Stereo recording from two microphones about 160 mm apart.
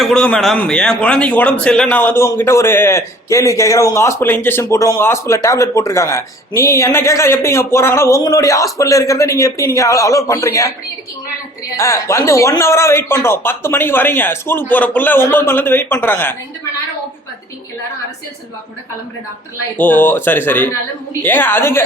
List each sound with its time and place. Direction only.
0.0 s a man's voice: 5° left (ahead or behind)
11.8 s a man's voice: 20° left (ahead or behind)
19.7 s a man's voice: 10° left (ahead or behind)